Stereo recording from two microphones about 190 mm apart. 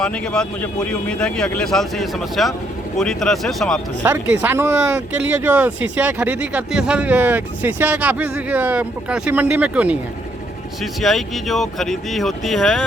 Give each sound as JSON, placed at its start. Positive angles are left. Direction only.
{"t": 0.0, "sound": "a man's voice", "side_deg": 5}
{"t": 4.0, "sound": "speech", "side_deg": -10}
{"t": 11.0, "sound": "a man's voice", "side_deg": 0}